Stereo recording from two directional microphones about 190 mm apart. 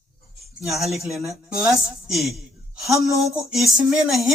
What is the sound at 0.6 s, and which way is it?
Speech, centre (ahead or behind).